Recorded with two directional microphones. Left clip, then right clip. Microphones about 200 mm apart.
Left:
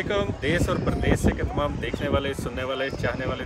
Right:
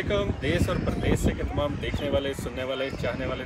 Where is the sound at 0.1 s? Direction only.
5° left (ahead or behind).